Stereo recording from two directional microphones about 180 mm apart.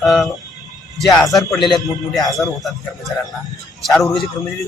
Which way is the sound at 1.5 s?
25° left (ahead or behind).